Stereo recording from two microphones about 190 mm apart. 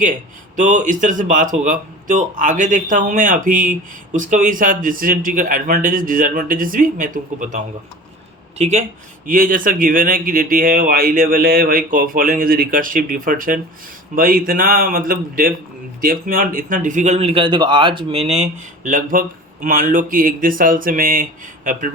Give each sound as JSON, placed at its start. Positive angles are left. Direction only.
{"t": 0.5, "sound": "a man's voice", "side_deg": -40}
{"t": 9.2, "sound": "a man's voice", "side_deg": -45}